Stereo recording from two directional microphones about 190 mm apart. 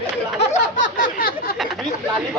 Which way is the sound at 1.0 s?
50° left (ahead or behind).